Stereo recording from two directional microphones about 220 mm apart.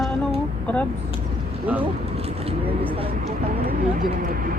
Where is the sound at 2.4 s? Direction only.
25° right (ahead or behind).